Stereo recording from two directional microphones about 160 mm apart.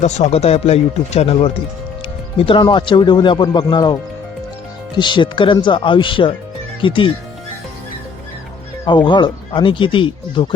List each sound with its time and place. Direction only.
0.0 s speech: 45° left (ahead or behind); by 3.9 s 25° left (ahead or behind)
4.9 s speech: 30° left (ahead or behind)
8.9 s speech: 30° left (ahead or behind)